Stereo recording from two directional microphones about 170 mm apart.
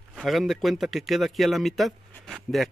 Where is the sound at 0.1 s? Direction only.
Centre (ahead or behind).